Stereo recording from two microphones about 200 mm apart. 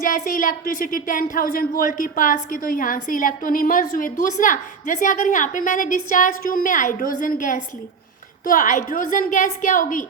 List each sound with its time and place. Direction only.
0.0 s a woman's voice: 45° left (ahead or behind)